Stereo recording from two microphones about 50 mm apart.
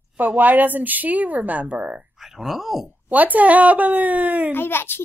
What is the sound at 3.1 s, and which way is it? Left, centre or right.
A woman's voice, right.